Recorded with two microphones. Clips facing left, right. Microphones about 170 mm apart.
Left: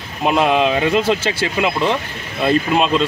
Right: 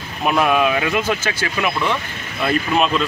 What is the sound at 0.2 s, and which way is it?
Speech, 20° left (ahead or behind).